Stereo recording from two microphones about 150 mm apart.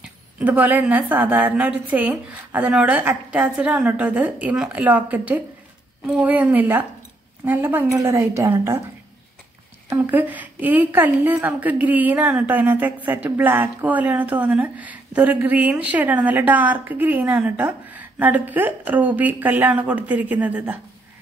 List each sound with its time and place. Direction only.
0.4 s a woman's voice: 10° right (ahead or behind)
9.8 s a woman's voice: 10° right (ahead or behind)